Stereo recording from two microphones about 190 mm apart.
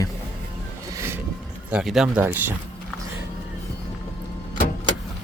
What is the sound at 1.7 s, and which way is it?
Speech, centre (ahead or behind).